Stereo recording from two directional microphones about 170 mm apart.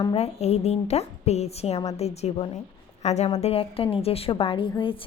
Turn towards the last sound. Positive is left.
turn(degrees=30)  # may be behind; listen again after turning